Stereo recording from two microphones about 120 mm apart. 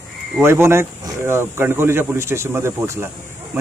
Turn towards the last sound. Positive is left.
turn(degrees=-20)  # may be behind; listen again after turning